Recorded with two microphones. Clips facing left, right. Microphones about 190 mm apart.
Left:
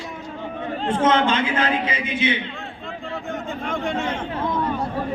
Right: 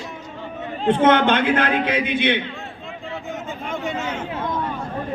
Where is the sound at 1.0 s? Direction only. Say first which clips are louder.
Right 2 dB; 60° right (ahead or behind).